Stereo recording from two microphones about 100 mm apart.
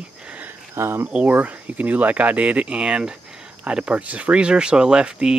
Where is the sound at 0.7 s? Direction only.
25° right (ahead or behind).